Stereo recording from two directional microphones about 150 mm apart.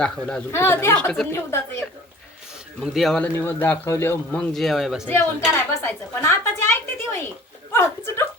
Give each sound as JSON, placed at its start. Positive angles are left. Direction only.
{"t": 0.0, "sound": "speech", "side_deg": 5}
{"t": 0.9, "sound": "speech", "side_deg": 5}
{"t": 1.3, "sound": "speech", "side_deg": 15}
{"t": 2.8, "sound": "speech", "side_deg": 0}
{"t": 3.3, "sound": "speech", "side_deg": 15}
{"t": 4.5, "sound": "speech", "side_deg": 0}
{"t": 5.5, "sound": "a sound", "side_deg": 15}